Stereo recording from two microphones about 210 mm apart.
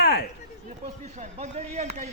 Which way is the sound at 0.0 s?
50° left (ahead or behind).